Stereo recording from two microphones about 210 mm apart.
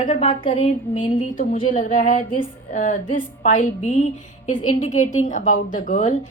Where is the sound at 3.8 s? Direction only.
35° left (ahead or behind).